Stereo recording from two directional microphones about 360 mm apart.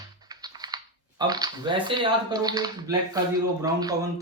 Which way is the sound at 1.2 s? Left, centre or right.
Centre.